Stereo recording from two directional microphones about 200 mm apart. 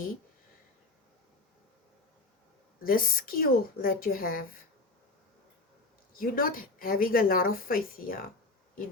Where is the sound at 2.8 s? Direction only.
45° left (ahead or behind).